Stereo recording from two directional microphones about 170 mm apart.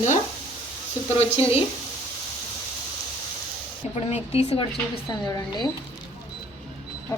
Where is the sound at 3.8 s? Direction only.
40° left (ahead or behind).